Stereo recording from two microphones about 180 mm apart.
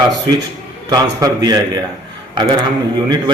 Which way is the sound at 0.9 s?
20° right (ahead or behind).